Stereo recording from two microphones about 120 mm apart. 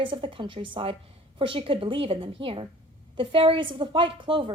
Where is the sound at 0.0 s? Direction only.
45° right (ahead or behind).